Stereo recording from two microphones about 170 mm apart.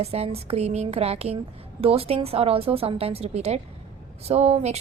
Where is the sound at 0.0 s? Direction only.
35° right (ahead or behind).